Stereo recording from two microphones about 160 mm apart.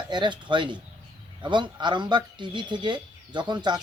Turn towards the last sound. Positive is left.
turn(degrees=-25)  # may be behind; listen again after turning